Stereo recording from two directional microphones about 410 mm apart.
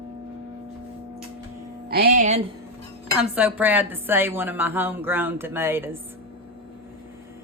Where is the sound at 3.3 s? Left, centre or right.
Centre.